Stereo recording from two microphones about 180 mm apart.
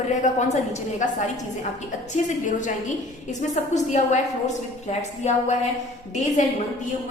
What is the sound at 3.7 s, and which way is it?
A woman's voice, 40° left (ahead or behind).